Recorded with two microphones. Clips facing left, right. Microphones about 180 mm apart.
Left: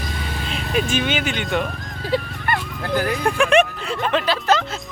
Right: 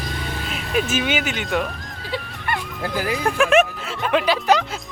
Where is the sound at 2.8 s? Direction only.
5° right (ahead or behind).